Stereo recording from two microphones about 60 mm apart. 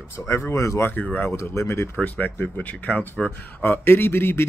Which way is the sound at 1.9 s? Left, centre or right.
Left.